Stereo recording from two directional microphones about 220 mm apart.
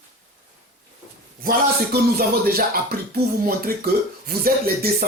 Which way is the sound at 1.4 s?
45° right (ahead or behind).